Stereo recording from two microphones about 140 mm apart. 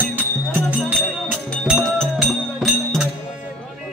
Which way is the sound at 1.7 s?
Centre (ahead or behind).